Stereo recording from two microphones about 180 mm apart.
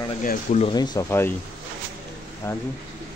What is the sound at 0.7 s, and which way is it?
Speech, 25° left (ahead or behind).